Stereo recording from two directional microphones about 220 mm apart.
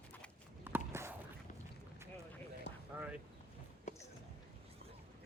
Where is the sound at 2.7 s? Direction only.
50° left (ahead or behind).